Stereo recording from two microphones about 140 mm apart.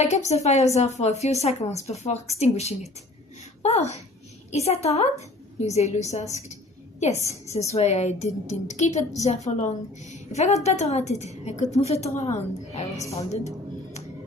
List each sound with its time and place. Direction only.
0.0 s a woman's voice: 55° left (ahead or behind)